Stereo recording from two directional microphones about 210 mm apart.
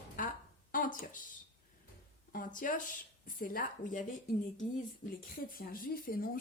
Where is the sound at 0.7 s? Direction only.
40° left (ahead or behind).